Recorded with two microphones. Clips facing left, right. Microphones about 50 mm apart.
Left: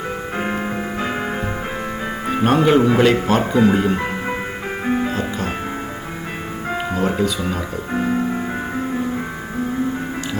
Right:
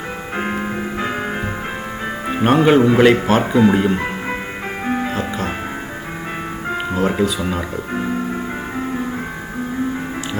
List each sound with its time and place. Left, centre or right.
0.5 s music: centre
2.2 s music: centre
2.6 s speech: centre
4.9 s music: centre
6.9 s music: centre